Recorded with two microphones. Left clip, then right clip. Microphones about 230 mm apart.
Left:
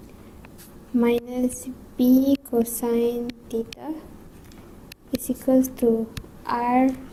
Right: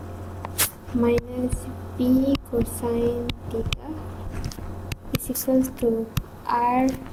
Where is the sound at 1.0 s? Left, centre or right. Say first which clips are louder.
Left 1 dB; left.